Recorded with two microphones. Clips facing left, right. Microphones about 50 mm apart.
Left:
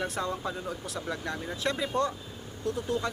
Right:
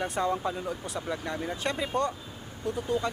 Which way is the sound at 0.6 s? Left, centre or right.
Centre.